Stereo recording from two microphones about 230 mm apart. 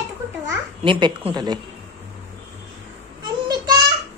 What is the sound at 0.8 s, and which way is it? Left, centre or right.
Speech, right.